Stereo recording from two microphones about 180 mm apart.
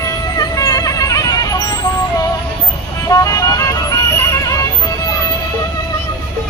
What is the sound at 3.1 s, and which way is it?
Music, 20° left (ahead or behind).